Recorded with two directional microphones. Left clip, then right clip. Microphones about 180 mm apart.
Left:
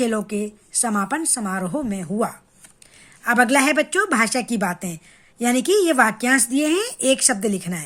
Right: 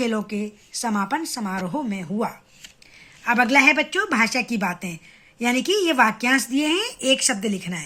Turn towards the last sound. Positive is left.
turn(degrees=50)  # may be behind; listen again after turning